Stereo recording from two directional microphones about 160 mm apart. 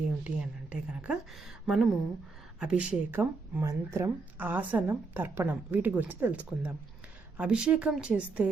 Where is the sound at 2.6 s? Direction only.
5° right (ahead or behind).